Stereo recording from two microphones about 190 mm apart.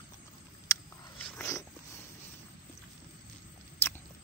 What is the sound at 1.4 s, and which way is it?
Dog, 15° left (ahead or behind).